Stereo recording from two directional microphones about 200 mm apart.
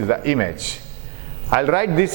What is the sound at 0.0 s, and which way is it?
Speech, 15° right (ahead or behind).